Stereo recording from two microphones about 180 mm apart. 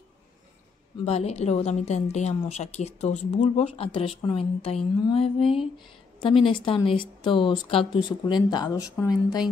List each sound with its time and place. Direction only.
1.0 s a woman's voice: 35° left (ahead or behind)